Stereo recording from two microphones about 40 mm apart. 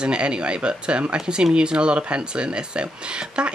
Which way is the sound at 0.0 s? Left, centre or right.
Right.